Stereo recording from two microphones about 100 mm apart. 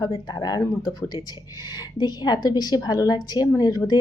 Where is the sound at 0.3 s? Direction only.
45° left (ahead or behind).